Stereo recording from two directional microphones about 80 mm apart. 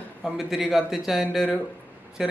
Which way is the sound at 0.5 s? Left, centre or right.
Centre.